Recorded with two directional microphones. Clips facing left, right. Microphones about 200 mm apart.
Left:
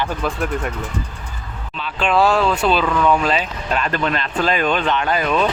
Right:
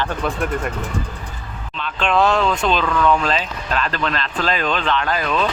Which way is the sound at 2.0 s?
5° left (ahead or behind).